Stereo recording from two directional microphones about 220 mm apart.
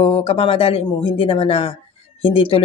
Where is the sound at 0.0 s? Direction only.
25° left (ahead or behind).